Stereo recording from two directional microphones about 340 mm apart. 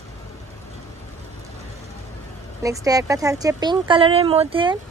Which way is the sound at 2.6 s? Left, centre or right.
Centre.